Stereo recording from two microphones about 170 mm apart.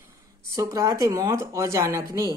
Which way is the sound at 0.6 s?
20° right (ahead or behind).